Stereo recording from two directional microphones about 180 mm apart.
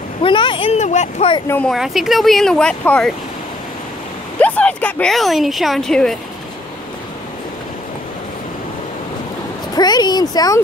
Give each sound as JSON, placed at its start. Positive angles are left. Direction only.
{"t": 0.2, "sound": "speech", "side_deg": 30}
{"t": 1.5, "sound": "speech", "side_deg": 5}
{"t": 4.4, "sound": "speech", "side_deg": 10}
{"t": 9.8, "sound": "speech", "side_deg": 25}